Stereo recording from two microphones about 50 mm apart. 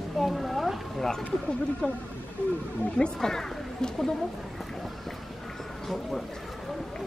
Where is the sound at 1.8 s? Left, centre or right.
Centre.